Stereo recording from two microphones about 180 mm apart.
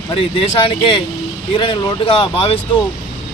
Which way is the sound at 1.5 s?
30° left (ahead or behind).